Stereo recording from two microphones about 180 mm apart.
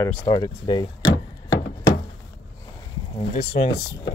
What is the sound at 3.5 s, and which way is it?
Speech, 55° left (ahead or behind).